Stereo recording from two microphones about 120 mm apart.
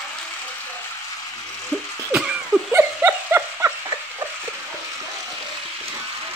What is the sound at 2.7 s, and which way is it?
Dog, 20° right (ahead or behind).